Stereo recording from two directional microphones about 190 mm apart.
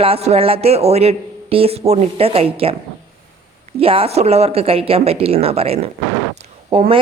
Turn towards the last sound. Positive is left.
turn(degrees=-30)  # may be behind; listen again after turning